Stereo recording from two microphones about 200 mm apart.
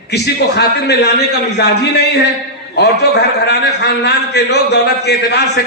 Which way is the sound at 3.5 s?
55° left (ahead or behind).